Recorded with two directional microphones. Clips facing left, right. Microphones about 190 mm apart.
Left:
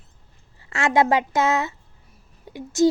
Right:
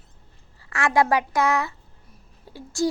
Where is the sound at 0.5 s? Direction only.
25° left (ahead or behind).